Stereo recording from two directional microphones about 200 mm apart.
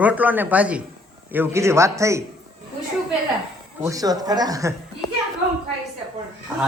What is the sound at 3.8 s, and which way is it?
Speech, 15° right (ahead or behind).